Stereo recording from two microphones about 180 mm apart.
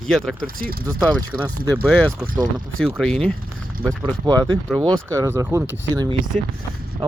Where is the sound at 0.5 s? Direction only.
55° right (ahead or behind).